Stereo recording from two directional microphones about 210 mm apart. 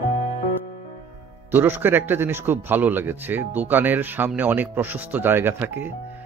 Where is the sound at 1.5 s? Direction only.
10° right (ahead or behind).